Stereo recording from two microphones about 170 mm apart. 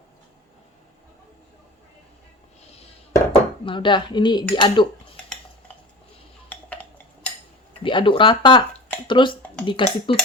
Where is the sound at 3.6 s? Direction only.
30° left (ahead or behind).